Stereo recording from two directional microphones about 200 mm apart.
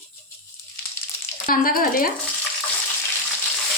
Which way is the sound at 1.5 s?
45° left (ahead or behind).